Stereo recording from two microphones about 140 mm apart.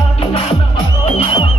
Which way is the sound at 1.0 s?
50° left (ahead or behind).